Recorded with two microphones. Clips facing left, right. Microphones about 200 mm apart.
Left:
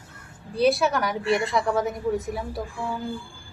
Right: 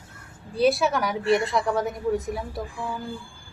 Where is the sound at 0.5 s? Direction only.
Centre (ahead or behind).